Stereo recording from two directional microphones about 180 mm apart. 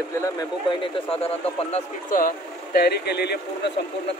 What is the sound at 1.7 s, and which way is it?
Speech, 40° left (ahead or behind).